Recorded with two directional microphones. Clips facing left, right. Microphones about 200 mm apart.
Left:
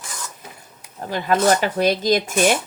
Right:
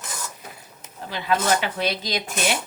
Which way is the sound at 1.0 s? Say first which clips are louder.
Left 5 dB; 45° left (ahead or behind).